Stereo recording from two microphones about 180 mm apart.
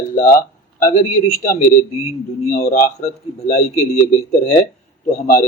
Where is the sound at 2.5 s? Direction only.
55° left (ahead or behind); by 3.7 s 40° left (ahead or behind).